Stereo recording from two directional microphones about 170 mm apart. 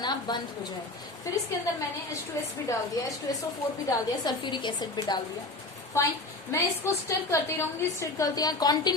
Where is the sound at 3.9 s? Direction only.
25° left (ahead or behind).